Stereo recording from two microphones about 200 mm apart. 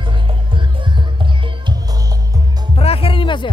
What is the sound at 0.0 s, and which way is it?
Music, 25° right (ahead or behind).